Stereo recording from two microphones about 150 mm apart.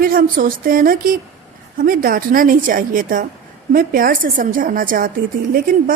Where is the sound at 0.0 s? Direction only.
70° right (ahead or behind).